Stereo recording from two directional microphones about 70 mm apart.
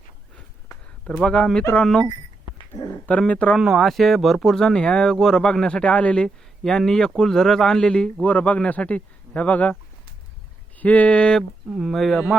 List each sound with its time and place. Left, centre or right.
1.0 s a man's voice: centre
3.1 s speech: centre
3.5 s a man's voice: centre; by 9.7 s left
10.8 s a man's voice: left
11.7 s speech: centre